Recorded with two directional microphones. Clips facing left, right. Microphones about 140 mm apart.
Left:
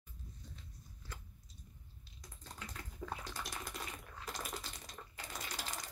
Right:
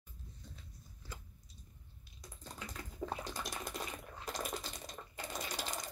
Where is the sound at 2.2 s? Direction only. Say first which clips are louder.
Right 3 dB; 15° right (ahead or behind).